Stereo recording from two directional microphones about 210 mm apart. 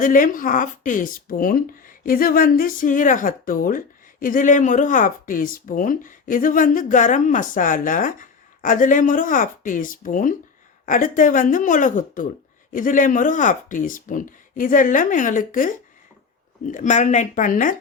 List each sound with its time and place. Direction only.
0.0 s speech: 40° left (ahead or behind)